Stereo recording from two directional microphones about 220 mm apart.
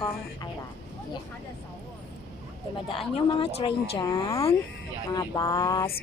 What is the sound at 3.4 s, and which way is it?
Speech, 25° left (ahead or behind).